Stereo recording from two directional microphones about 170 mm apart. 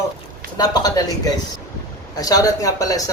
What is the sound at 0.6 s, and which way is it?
Speech, 25° left (ahead or behind).